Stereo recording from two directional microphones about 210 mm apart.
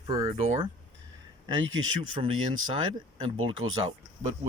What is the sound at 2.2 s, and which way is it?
Speech, 25° right (ahead or behind).